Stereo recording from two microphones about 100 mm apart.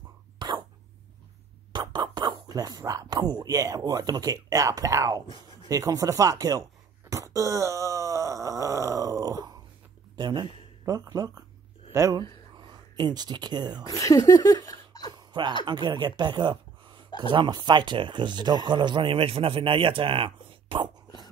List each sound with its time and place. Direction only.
0.4 s cough: 50° right (ahead or behind)
1.7 s speech: 50° right (ahead or behind)
7.1 s groan: 30° right (ahead or behind)
10.1 s speech: 45° right (ahead or behind)
12.5 s speech: 45° right (ahead or behind)
13.8 s speech: 35° left (ahead or behind)
14.7 s a sound: 40° left (ahead or behind)
15.1 s a sound: 50° right (ahead or behind)
15.6 s speech: 45° right (ahead or behind)